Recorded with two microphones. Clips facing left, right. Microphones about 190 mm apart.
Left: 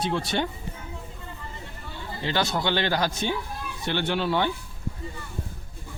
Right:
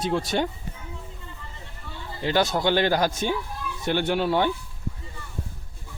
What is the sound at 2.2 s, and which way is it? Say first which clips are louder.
Speech: right 4 dB; 45° right (ahead or behind).